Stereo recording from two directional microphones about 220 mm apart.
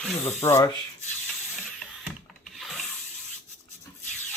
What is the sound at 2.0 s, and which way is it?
Rub, centre (ahead or behind).